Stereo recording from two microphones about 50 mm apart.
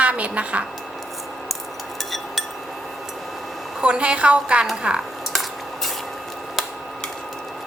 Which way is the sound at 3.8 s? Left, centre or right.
Right.